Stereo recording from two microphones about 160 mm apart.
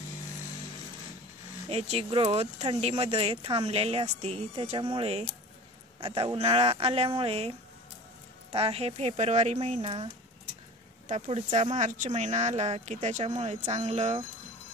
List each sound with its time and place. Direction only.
1.7 s speech: 40° right (ahead or behind)